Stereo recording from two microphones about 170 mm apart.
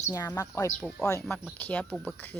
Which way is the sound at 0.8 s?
Centre (ahead or behind).